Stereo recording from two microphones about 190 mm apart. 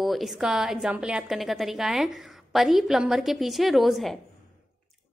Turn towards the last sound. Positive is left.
turn(degrees=0)  # may be behind; listen again after turning